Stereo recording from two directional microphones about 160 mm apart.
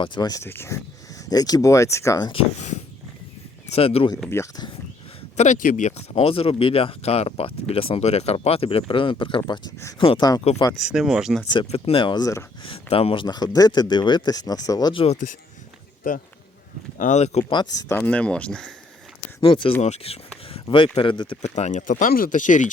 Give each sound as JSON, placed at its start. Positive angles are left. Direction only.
{"t": 0.0, "sound": "speech", "side_deg": 25}
{"t": 2.6, "sound": "a sound", "side_deg": 45}
{"t": 3.7, "sound": "speech", "side_deg": 40}
{"t": 4.3, "sound": "speech", "side_deg": 15}
{"t": 5.4, "sound": "speech", "side_deg": 50}
{"t": 10.8, "sound": "speech", "side_deg": -5}
{"t": 11.5, "sound": "speech", "side_deg": 35}
{"t": 12.6, "sound": "speech", "side_deg": 35}
{"t": 15.0, "sound": "speech", "side_deg": 40}
{"t": 17.0, "sound": "speech", "side_deg": 45}
{"t": 17.5, "sound": "speech", "side_deg": 25}
{"t": 17.9, "sound": "speech", "side_deg": 10}
{"t": 19.4, "sound": "speech", "side_deg": 30}
{"t": 21.4, "sound": "speech", "side_deg": 45}